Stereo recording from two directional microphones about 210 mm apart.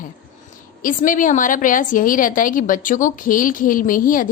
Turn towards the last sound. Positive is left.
turn(degrees=40)  # may be behind; listen again after turning